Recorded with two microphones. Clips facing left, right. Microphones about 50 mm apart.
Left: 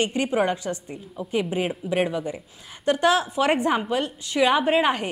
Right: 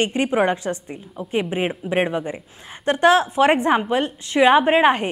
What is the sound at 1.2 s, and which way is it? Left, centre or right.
Speech, centre.